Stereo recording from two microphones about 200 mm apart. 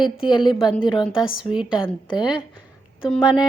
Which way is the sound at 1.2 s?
5° right (ahead or behind).